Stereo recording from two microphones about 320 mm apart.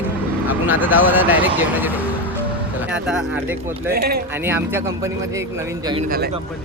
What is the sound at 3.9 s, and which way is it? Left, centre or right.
Speech, right.